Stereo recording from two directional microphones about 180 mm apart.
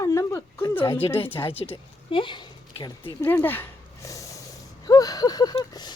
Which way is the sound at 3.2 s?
15° left (ahead or behind).